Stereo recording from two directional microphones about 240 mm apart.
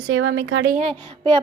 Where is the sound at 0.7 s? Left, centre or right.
Right.